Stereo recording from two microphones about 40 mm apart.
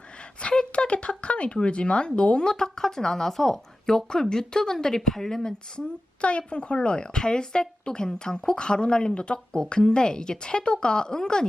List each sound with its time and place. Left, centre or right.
0.3 s a woman's voice: left; by 5.4 s centre
5.4 s a woman's voice: centre